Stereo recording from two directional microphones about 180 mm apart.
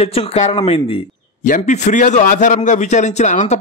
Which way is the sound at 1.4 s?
45° left (ahead or behind).